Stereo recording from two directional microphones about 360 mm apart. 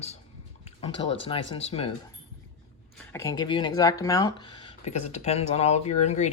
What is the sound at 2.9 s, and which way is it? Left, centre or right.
Speech, centre.